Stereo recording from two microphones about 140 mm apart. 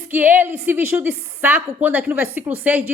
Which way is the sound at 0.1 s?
15° right (ahead or behind).